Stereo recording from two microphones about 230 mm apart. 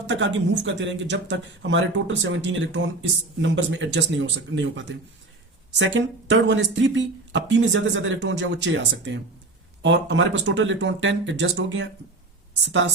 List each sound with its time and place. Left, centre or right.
0.1 s speech: right